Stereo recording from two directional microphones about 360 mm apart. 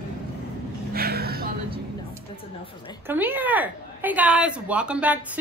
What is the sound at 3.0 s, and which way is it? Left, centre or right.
A woman's voice, centre.